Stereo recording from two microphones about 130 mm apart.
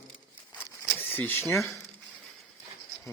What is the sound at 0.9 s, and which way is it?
Speech, 15° left (ahead or behind).